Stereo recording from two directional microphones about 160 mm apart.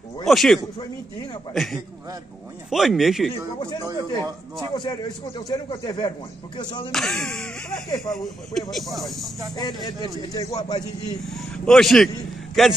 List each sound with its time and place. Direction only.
0.2 s speech: centre (ahead or behind)
3.3 s speech: 25° left (ahead or behind)
6.9 s speech: 5° left (ahead or behind)
9.6 s speech: 25° left (ahead or behind)
11.2 s speech: 5° left (ahead or behind)